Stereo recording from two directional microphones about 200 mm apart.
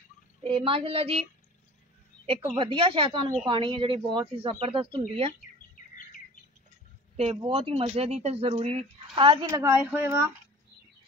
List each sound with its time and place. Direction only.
0.4 s speech: 25° right (ahead or behind)
2.2 s speech: 25° right (ahead or behind)
7.2 s speech: 30° right (ahead or behind)
9.8 s speech: 10° right (ahead or behind)